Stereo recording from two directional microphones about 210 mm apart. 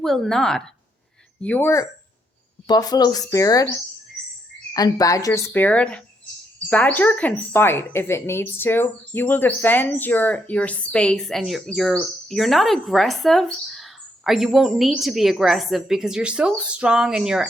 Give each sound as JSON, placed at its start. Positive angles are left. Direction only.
{"t": 0.0, "sound": "speech", "side_deg": 0}
{"t": 4.7, "sound": "speech", "side_deg": 15}